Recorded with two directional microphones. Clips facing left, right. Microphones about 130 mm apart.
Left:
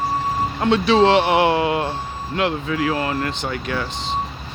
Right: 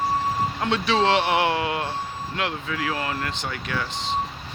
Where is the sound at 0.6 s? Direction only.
25° left (ahead or behind).